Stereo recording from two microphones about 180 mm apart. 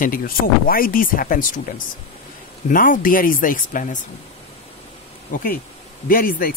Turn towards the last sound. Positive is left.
turn(degrees=55)  # may be behind; listen again after turning